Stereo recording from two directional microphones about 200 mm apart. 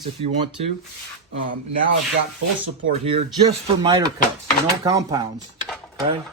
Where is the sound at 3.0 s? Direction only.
25° right (ahead or behind).